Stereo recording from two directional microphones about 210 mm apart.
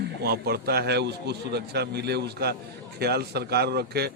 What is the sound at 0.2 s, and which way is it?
A man's voice, 50° right (ahead or behind).